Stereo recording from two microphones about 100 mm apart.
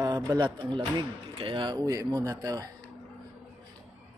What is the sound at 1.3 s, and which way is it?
Speech, 60° right (ahead or behind).